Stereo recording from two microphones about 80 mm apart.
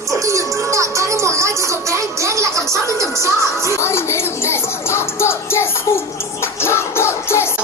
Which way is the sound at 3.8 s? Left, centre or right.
Left.